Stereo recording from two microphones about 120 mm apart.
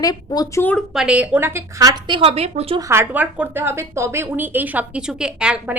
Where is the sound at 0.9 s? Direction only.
10° right (ahead or behind); by 2.1 s 30° right (ahead or behind).